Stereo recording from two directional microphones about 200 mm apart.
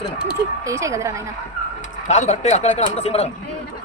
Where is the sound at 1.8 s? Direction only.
35° left (ahead or behind).